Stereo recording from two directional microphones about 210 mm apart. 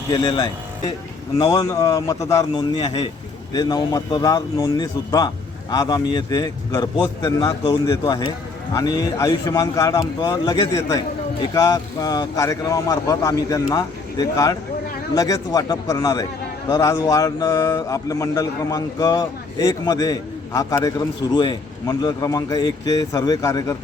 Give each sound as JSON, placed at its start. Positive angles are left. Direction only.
{"t": 0.1, "sound": "speech", "side_deg": 20}